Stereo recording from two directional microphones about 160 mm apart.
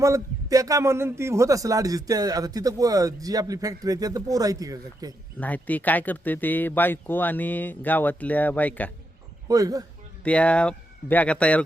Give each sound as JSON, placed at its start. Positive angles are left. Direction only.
{"t": 0.0, "sound": "a man's voice", "side_deg": -20}
{"t": 5.4, "sound": "speech", "side_deg": 10}
{"t": 9.5, "sound": "a man's voice", "side_deg": -20}
{"t": 10.2, "sound": "speech", "side_deg": 10}